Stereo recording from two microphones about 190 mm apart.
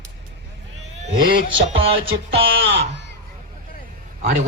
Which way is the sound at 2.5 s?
80° right.